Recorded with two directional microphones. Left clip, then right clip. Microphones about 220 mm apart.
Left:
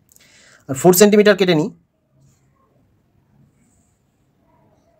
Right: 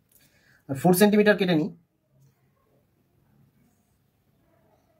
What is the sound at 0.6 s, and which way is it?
Speech, 40° left (ahead or behind).